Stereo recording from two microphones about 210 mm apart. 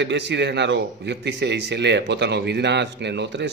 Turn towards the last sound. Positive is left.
turn(degrees=-55)  # may be behind; listen again after turning